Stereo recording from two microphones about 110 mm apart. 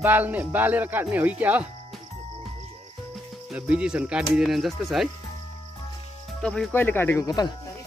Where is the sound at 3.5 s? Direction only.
10° right (ahead or behind).